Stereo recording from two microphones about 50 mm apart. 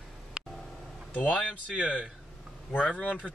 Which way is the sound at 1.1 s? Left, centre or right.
Left.